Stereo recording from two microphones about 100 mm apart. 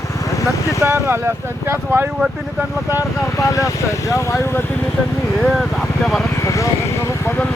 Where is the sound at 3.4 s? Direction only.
30° left (ahead or behind).